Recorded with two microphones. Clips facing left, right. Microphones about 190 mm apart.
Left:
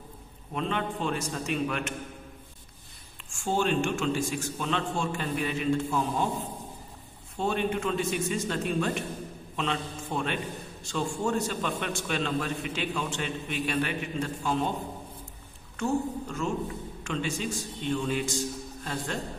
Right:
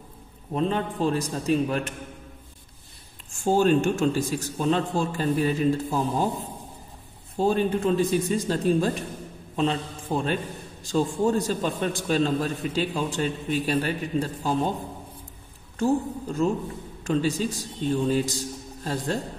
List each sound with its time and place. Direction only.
0.5 s a man's voice: 35° right (ahead or behind)
3.3 s a man's voice: 40° right (ahead or behind)
7.3 s a man's voice: 35° right (ahead or behind)
15.8 s a man's voice: 35° right (ahead or behind)